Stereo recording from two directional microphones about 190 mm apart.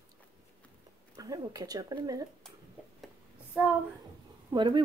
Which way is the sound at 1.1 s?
20° right (ahead or behind).